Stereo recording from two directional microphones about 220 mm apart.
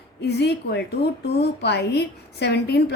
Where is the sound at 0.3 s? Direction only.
50° left (ahead or behind).